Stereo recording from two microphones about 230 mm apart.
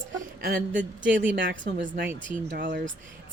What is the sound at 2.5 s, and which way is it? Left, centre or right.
Speech, right.